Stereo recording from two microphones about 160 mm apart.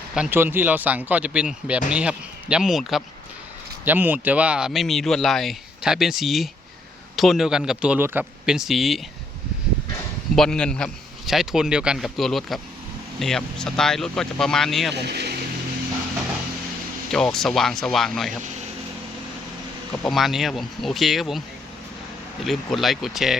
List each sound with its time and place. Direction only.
0.1 s speech: 10° right (ahead or behind)
10.3 s speech: 5° left (ahead or behind)
14.9 s speech: 90° right
17.1 s speech: 5° left (ahead or behind)
20.1 s speech: centre (ahead or behind)
22.4 s speech: centre (ahead or behind)